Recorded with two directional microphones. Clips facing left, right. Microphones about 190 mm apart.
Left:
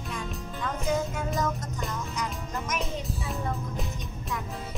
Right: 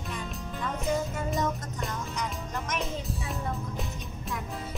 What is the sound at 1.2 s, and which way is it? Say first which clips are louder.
Music: even; centre (ahead or behind).